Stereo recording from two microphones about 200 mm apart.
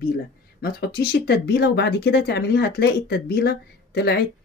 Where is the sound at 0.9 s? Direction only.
50° left (ahead or behind).